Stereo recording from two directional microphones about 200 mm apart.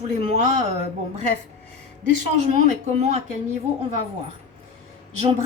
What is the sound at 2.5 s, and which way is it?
A woman's voice, 35° right (ahead or behind).